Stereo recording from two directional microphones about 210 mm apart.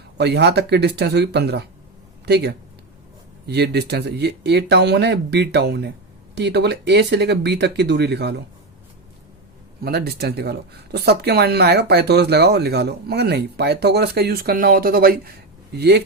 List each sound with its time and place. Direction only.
0.2 s speech: 55° right (ahead or behind)
9.8 s speech: 50° right (ahead or behind)